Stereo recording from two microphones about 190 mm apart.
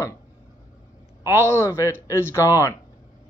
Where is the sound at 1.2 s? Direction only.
15° left (ahead or behind).